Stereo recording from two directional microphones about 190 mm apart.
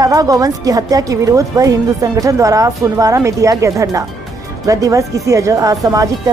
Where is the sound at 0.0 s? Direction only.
20° right (ahead or behind).